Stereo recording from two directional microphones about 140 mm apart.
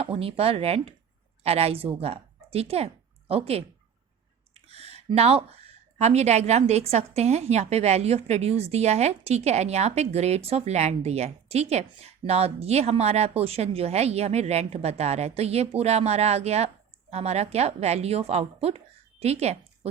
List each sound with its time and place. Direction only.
0.0 s a woman's voice: 45° right (ahead or behind)
4.5 s a sound: 45° right (ahead or behind)
5.1 s a woman's voice: 45° right (ahead or behind)